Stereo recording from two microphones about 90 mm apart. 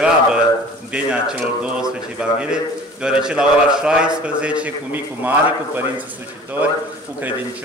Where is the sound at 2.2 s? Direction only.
10° right (ahead or behind).